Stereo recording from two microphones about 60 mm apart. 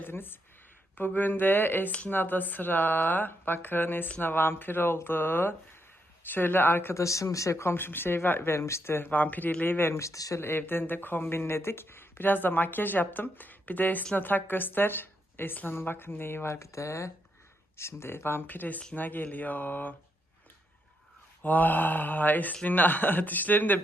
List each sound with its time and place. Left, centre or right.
0.0 s speech: left
6.9 s speech: left
9.6 s speech: left
10.0 s speech: left
10.4 s speech: left
18.9 s mantra: left
21.4 s mantra: left
22.6 s speech: left